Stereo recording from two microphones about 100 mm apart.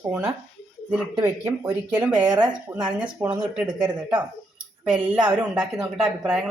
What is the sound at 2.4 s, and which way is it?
Speech, 15° right (ahead or behind).